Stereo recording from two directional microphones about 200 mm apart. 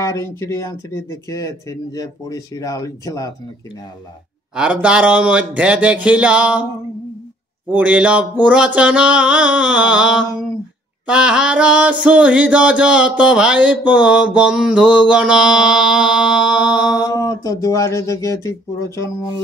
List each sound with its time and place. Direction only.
0.0 s speech: 15° left (ahead or behind)
4.6 s speech: 5° right (ahead or behind)
7.7 s mantra: 5° right (ahead or behind)
17.0 s speech: 15° left (ahead or behind)